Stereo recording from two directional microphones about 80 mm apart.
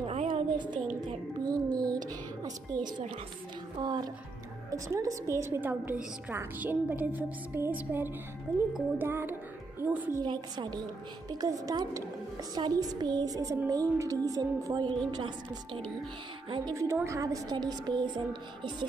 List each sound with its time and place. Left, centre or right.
0.3 s a sound: right
1.0 s music: right
3.8 s a sound: right
4.6 s a woman's voice: right
5.6 s speech: right
8.9 s music: right
10.2 s a sound: right
11.2 s a woman's voice: right
12.5 s a sound: right
13.7 s a woman's voice: right
16.4 s a woman's voice: right
16.7 s a woman's voice: right
17.6 s speech: right